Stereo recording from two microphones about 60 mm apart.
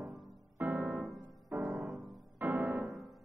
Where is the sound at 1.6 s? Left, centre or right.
Right.